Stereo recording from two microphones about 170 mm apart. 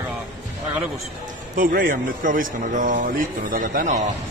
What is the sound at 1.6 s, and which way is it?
A man's voice, 55° right (ahead or behind).